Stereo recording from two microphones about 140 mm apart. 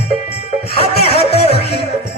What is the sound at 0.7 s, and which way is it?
Music, 45° left (ahead or behind).